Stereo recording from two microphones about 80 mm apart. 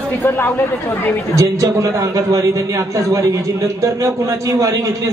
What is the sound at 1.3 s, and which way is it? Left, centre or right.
A man's voice, right.